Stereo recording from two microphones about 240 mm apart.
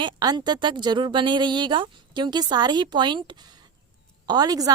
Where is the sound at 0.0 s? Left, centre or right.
Centre.